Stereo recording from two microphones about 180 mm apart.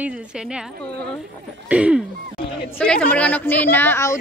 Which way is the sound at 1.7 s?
5° right (ahead or behind).